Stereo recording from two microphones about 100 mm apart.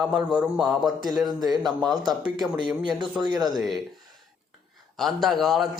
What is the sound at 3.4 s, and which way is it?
Speech, centre (ahead or behind).